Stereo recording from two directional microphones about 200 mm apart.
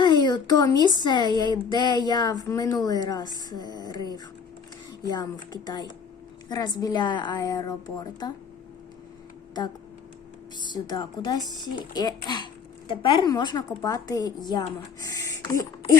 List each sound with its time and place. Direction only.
0.0 s speech: 20° left (ahead or behind)
10.7 s speech: 20° left (ahead or behind)